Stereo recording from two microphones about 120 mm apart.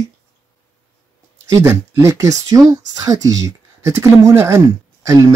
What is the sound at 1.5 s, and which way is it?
Speech, 25° right (ahead or behind).